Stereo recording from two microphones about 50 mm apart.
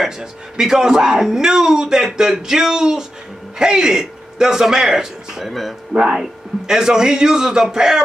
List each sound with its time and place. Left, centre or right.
0.0 s a man's voice: centre
5.9 s speech: centre